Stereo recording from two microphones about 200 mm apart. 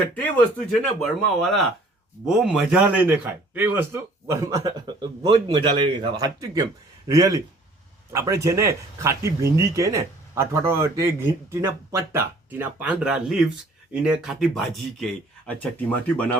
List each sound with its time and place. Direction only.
0.7 s a man's voice: centre (ahead or behind)